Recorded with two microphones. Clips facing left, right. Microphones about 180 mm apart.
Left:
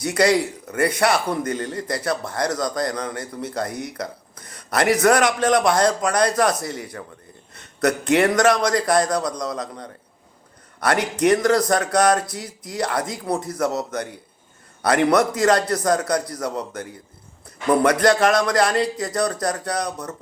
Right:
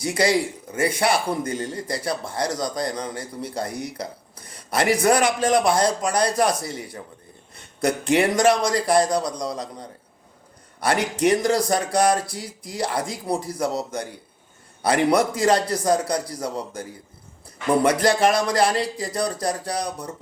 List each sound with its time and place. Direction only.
0.0 s speech: 30° right (ahead or behind)
1.3 s a man's voice: 10° right (ahead or behind)
1.5 s a man's voice: 30° right (ahead or behind)
10.8 s speech: 30° right (ahead or behind)
18.2 s speech: 30° right (ahead or behind)